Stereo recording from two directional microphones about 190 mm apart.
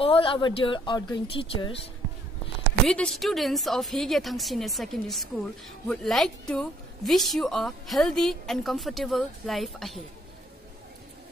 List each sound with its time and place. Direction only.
0.0 s speech: 30° left (ahead or behind)
2.9 s a woman's voice: 5° left (ahead or behind)